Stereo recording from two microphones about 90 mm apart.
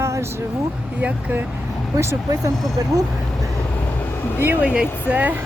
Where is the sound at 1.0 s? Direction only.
20° right (ahead or behind).